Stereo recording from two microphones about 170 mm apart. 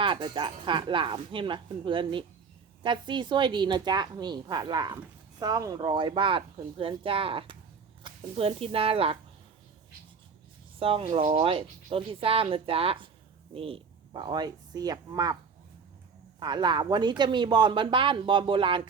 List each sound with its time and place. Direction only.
0.0 s speech: 30° right (ahead or behind)
10.8 s speech: 35° right (ahead or behind)
16.4 s speech: 25° right (ahead or behind)